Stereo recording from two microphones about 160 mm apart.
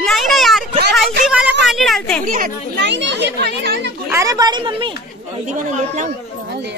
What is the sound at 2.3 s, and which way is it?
Speech, 75° right (ahead or behind).